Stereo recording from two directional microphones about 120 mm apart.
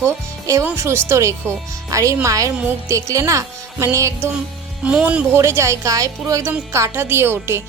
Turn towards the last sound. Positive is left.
turn(degrees=-20)  # may be behind; listen again after turning